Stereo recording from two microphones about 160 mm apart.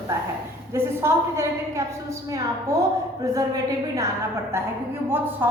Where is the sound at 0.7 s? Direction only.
15° right (ahead or behind).